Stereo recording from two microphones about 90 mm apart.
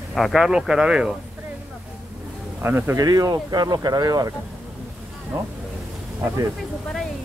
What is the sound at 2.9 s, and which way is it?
Speech, 40° right (ahead or behind).